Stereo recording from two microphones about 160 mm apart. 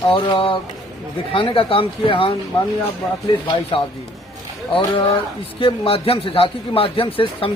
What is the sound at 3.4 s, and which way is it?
Speech, 30° left (ahead or behind).